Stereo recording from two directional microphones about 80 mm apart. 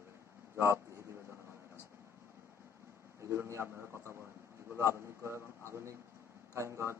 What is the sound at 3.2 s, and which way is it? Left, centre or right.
Speech, right.